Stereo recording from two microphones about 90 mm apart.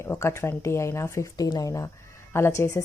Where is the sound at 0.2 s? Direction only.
30° left (ahead or behind).